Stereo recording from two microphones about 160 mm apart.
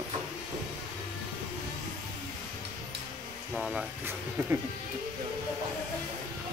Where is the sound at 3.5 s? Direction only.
Centre (ahead or behind).